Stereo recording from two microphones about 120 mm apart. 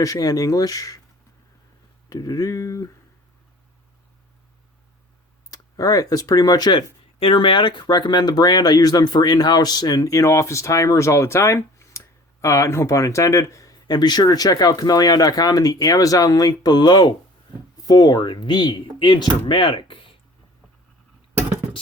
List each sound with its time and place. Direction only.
0.0 s speech: 30° left (ahead or behind)
2.0 s speech: 30° left (ahead or behind)
5.5 s speech: 30° left (ahead or behind); by 20.1 s 45° left (ahead or behind)